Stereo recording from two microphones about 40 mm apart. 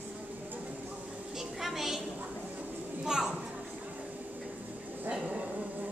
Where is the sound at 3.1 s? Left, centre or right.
Centre.